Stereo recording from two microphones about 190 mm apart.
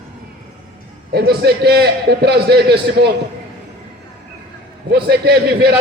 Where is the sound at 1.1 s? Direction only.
55° right (ahead or behind).